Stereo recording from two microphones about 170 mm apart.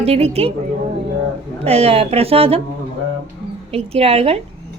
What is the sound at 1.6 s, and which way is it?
A woman's voice, 35° right (ahead or behind).